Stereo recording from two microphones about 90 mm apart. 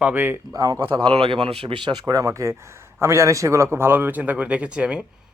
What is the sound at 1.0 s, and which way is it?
Speech, 75° right (ahead or behind).